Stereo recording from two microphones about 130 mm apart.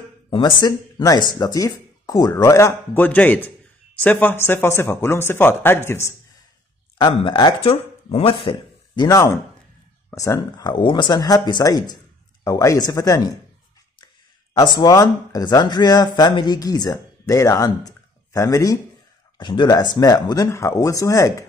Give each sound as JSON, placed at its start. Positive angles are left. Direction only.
{"t": 0.3, "sound": "speech", "side_deg": 35}
{"t": 7.0, "sound": "speech", "side_deg": 40}
{"t": 7.6, "sound": "speech", "side_deg": 50}
{"t": 14.6, "sound": "speech", "side_deg": 30}